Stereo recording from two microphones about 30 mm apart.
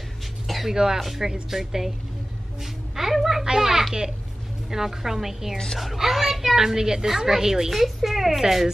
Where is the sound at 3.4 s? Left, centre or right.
Centre.